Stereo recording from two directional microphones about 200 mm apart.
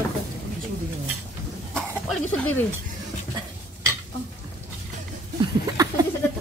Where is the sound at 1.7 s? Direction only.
5° left (ahead or behind).